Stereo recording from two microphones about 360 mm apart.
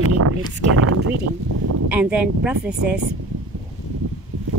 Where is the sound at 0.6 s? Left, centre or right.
Right.